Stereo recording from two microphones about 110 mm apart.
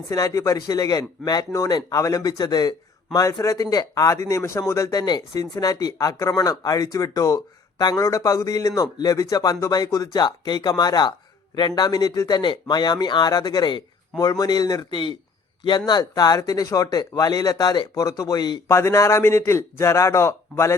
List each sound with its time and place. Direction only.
0.1 s speech: 30° left (ahead or behind)
18.7 s a man's voice: 25° left (ahead or behind)